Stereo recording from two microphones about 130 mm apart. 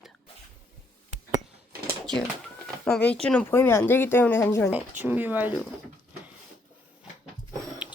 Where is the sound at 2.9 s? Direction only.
10° left (ahead or behind).